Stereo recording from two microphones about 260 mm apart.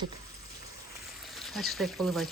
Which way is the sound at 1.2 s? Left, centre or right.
Centre.